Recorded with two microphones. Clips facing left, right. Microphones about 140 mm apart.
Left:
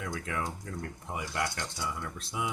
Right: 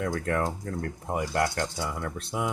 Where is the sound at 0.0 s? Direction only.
50° right (ahead or behind).